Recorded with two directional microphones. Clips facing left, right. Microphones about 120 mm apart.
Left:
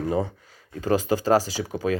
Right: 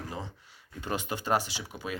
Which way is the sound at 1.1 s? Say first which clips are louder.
Left 8 dB; 90° left.